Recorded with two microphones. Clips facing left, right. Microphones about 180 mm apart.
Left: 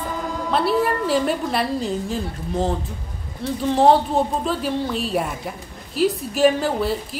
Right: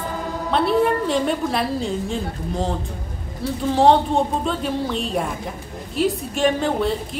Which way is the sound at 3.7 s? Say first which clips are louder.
Even; centre (ahead or behind).